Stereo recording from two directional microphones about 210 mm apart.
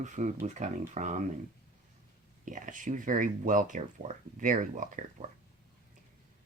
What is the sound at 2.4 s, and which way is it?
Speech, 40° right (ahead or behind).